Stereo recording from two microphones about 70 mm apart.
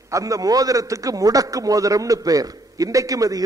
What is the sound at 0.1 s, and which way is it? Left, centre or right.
A man's voice, right.